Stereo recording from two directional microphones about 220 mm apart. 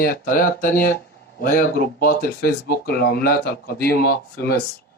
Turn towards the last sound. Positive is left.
turn(degrees=45)  # may be behind; listen again after turning